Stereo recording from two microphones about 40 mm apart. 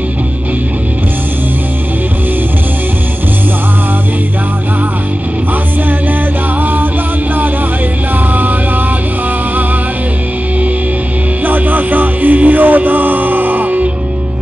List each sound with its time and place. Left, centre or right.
6.6 s music: right
11.4 s music: right